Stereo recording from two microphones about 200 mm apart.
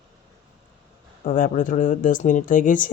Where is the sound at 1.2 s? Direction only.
40° left (ahead or behind).